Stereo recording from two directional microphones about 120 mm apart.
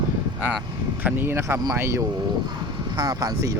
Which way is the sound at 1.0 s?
20° right (ahead or behind).